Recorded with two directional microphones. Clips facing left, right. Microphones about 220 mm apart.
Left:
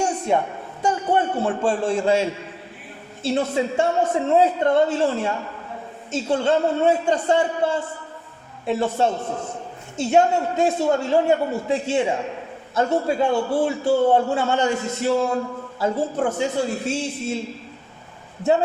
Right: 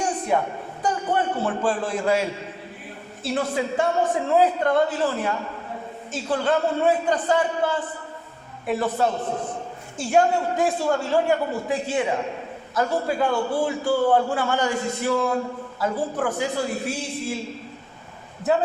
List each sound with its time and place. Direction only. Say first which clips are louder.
0.3 s a man's voice: left 1 dB; 25° left (ahead or behind)
3.2 s a man's voice: left 3 dB; 25° left (ahead or behind)